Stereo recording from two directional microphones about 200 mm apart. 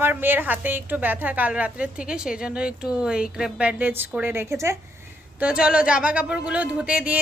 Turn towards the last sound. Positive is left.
turn(degrees=-5)  # may be behind; listen again after turning